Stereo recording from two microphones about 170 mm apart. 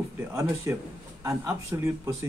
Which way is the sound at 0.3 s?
15° right (ahead or behind).